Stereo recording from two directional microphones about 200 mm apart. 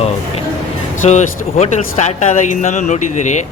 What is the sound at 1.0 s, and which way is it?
Speech, 35° left (ahead or behind).